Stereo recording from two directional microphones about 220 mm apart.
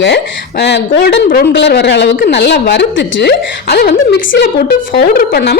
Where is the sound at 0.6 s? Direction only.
50° left (ahead or behind).